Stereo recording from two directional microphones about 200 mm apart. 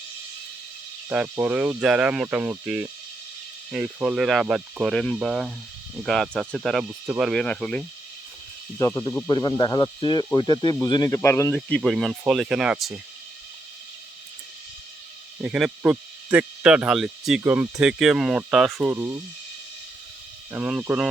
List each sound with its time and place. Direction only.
1.1 s speech: 5° right (ahead or behind)
8.8 s speech: 15° left (ahead or behind); by 13.0 s 5° right (ahead or behind)
15.4 s speech: 5° right (ahead or behind)
20.5 s speech: 5° right (ahead or behind)